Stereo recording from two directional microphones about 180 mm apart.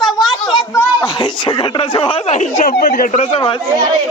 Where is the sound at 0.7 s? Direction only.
20° left (ahead or behind).